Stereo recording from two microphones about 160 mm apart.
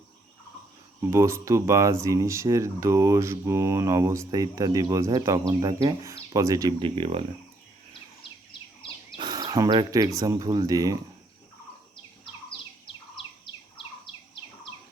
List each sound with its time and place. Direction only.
1.1 s speech: 20° right (ahead or behind); by 7.3 s 35° right (ahead or behind)
9.1 s speech: 25° right (ahead or behind)